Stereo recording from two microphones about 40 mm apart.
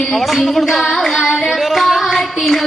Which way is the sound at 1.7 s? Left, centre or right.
Centre.